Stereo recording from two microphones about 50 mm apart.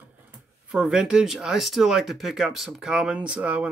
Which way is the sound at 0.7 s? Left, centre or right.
Centre.